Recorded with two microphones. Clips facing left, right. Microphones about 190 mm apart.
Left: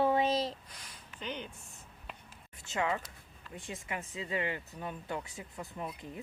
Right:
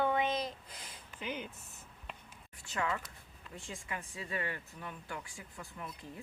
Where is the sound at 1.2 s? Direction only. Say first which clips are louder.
Even; 10° right (ahead or behind).